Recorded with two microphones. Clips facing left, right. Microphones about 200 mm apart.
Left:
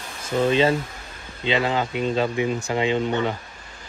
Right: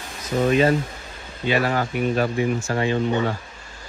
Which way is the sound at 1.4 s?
20° left (ahead or behind).